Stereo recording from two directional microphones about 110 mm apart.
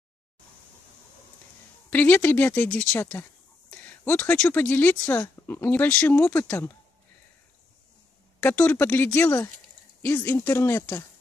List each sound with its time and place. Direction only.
1.9 s a woman's voice: 15° left (ahead or behind)
8.4 s a woman's voice: 15° left (ahead or behind)